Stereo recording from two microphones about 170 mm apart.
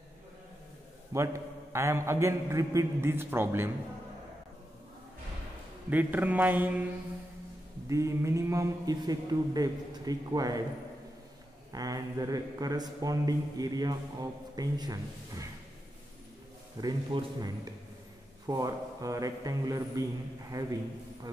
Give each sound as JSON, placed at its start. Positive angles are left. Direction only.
{"t": 1.1, "sound": "a man's voice", "side_deg": -15}
{"t": 5.9, "sound": "a man's voice", "side_deg": -10}
{"t": 7.9, "sound": "speech", "side_deg": -15}
{"t": 11.7, "sound": "speech", "side_deg": -20}
{"t": 16.8, "sound": "speech", "side_deg": -25}
{"t": 18.5, "sound": "speech", "side_deg": -20}